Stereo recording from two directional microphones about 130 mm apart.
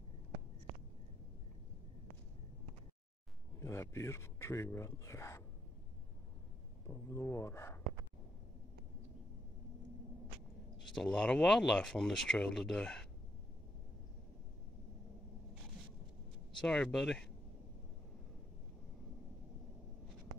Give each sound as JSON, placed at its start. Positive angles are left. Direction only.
{"t": 3.5, "sound": "speech", "side_deg": 20}
{"t": 6.9, "sound": "speech", "side_deg": 20}
{"t": 11.0, "sound": "speech", "side_deg": 5}
{"t": 16.6, "sound": "speech", "side_deg": 5}